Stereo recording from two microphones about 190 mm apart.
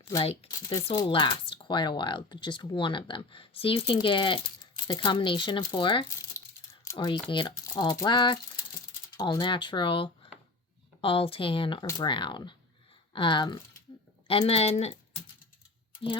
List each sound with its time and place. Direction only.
0.2 s a woman's voice: 30° left (ahead or behind)